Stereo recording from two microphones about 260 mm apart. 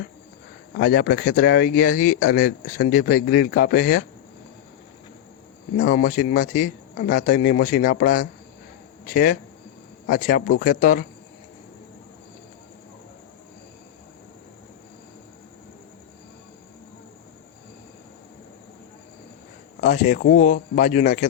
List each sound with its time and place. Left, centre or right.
0.8 s speech: left
5.7 s speech: left
19.8 s speech: left